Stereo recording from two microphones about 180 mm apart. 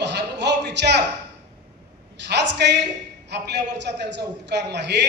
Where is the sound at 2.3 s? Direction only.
70° right (ahead or behind).